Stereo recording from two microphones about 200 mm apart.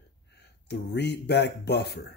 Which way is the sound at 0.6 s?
60° left (ahead or behind).